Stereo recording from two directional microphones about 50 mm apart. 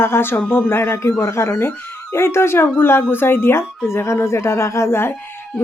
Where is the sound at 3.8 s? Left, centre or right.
Left.